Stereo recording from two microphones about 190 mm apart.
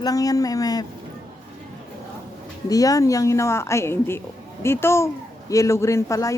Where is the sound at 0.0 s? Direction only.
20° left (ahead or behind).